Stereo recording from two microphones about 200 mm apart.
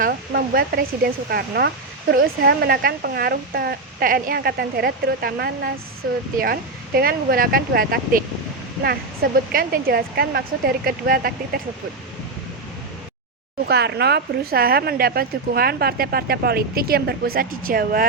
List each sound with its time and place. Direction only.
0.0 s speech: 45° right (ahead or behind)
13.7 s speech: 55° right (ahead or behind)